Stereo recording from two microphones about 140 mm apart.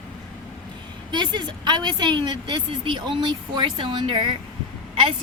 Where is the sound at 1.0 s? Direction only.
35° right (ahead or behind).